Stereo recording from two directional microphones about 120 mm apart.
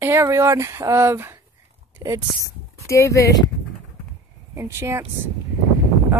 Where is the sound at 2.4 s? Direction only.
25° left (ahead or behind).